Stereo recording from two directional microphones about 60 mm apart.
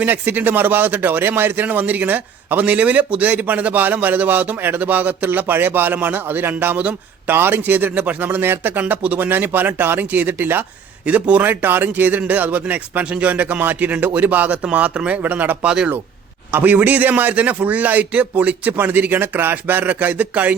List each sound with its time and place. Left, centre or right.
0.0 s speech: right
11.0 s speech: right
15.6 s speech: centre
16.5 s speech: right